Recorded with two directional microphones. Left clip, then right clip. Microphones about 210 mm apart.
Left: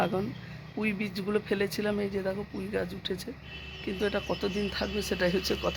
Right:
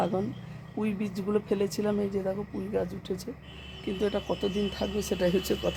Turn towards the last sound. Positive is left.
turn(degrees=-15)  # may be behind; listen again after turning